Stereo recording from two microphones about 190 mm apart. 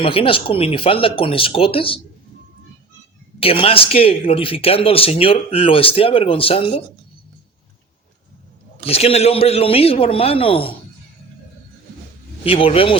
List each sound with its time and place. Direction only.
0.0 s speech: 30° left (ahead or behind)
3.4 s speech: 30° left (ahead or behind)
8.8 s a man's voice: 30° left (ahead or behind)
12.5 s speech: 30° left (ahead or behind)